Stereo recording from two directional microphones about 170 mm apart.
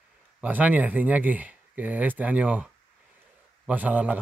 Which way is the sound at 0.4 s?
10° right (ahead or behind).